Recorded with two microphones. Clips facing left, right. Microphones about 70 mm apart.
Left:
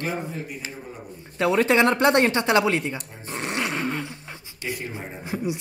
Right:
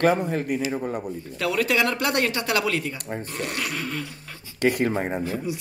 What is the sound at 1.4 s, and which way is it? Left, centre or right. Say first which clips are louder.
Speech: left 4 dB; left.